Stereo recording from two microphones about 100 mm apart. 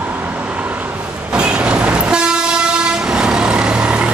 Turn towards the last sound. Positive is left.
turn(degrees=-10)  # may be behind; listen again after turning